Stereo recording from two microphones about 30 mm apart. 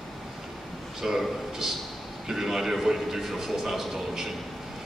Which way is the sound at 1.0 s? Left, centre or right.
Centre.